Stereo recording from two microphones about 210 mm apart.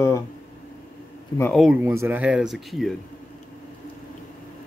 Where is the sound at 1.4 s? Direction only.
Centre (ahead or behind).